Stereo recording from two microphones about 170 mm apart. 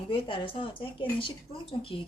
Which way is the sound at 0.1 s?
30° left (ahead or behind).